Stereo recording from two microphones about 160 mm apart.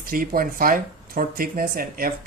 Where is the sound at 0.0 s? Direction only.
60° right (ahead or behind).